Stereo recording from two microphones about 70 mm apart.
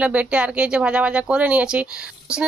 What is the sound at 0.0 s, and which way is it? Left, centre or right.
Speech, centre.